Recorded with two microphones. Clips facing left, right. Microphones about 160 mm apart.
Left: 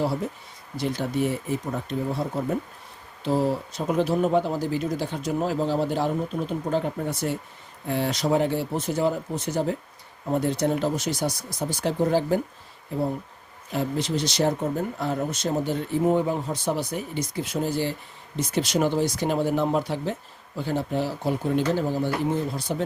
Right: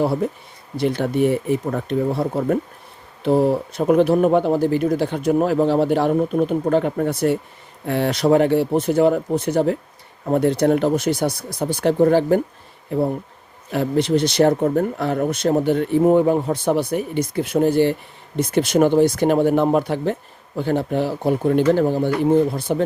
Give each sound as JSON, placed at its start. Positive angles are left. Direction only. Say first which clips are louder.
{"t": 0.2, "sound": "speech", "louder": "right 8 dB", "side_deg": -60}